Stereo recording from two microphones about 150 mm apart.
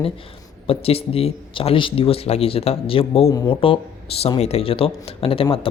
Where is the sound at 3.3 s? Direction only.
25° left (ahead or behind).